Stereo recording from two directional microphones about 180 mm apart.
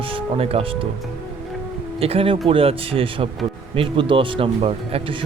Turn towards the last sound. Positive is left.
turn(degrees=-30)  # may be behind; listen again after turning